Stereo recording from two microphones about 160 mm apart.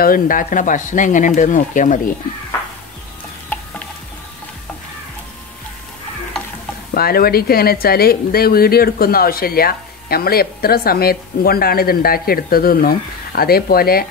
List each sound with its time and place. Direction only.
0.0 s speech: 60° left (ahead or behind)
6.9 s speech: 70° left (ahead or behind)